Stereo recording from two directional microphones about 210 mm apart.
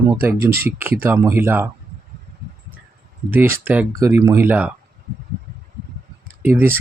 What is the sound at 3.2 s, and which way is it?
Speech, 10° right (ahead or behind).